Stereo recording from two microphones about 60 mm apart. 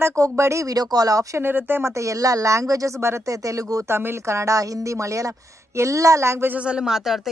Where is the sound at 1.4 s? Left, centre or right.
Right.